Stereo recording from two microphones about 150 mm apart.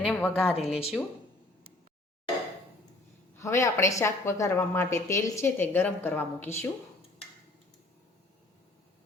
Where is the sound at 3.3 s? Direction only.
20° left (ahead or behind).